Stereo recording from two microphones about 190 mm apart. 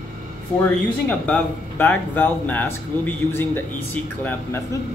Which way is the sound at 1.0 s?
10° left (ahead or behind).